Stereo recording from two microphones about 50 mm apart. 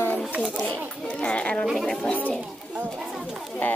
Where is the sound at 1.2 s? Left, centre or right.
Left.